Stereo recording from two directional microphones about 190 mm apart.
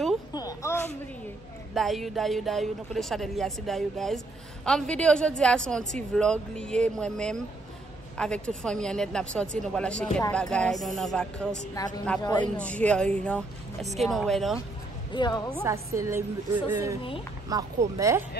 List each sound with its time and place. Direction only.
0.3 s a sound: 20° left (ahead or behind)
1.7 s speech: centre (ahead or behind)
11.8 s a woman's voice: 20° left (ahead or behind)
12.5 s speech: 5° left (ahead or behind)
15.1 s a woman's voice: 25° left (ahead or behind)
15.6 s a woman's voice: 15° right (ahead or behind)